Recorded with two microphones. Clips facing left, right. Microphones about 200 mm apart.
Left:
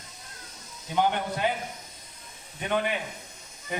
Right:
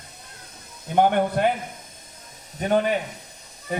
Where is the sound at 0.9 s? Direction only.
55° right (ahead or behind).